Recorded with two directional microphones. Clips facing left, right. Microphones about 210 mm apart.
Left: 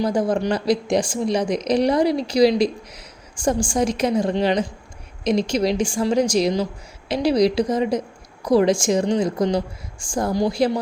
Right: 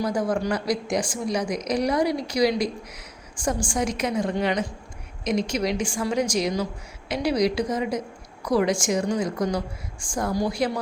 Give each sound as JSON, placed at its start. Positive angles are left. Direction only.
{"t": 0.0, "sound": "a woman's voice", "side_deg": 30}